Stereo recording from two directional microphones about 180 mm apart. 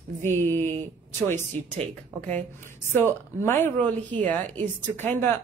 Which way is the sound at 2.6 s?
15° left (ahead or behind).